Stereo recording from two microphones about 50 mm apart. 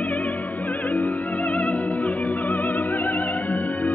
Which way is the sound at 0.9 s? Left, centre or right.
Left.